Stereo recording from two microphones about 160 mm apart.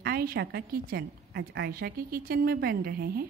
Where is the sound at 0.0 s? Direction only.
75° right (ahead or behind).